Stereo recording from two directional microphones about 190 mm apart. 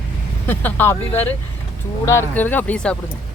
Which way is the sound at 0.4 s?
10° left (ahead or behind).